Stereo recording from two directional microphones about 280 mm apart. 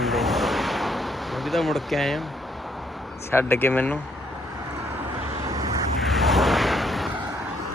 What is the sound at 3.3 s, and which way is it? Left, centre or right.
Speech, centre.